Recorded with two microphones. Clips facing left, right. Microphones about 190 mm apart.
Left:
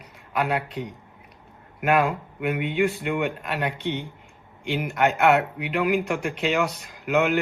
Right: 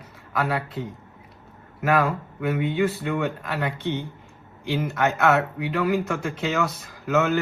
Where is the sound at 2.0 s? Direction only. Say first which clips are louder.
Even; 15° left (ahead or behind).